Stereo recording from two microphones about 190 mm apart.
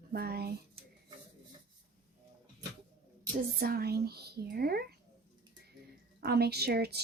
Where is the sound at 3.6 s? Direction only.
55° right (ahead or behind).